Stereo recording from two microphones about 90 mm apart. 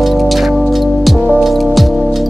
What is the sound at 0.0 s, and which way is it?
Music, centre (ahead or behind).